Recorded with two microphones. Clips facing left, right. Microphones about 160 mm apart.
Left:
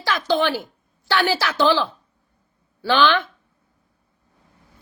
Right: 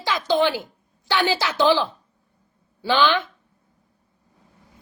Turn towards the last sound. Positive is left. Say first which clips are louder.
# left 2 dB
turn(degrees=-15)  # may be behind; listen again after turning